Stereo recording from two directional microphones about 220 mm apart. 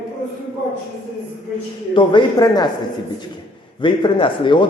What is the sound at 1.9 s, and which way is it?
Speech, 20° left (ahead or behind).